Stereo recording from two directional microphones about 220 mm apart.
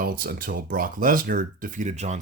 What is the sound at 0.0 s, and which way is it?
Speech, 40° right (ahead or behind).